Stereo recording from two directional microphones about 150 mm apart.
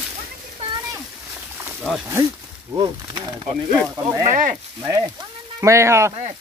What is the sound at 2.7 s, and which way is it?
Speech, 30° right (ahead or behind).